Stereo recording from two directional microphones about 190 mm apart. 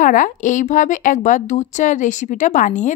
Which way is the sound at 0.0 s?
45° left (ahead or behind).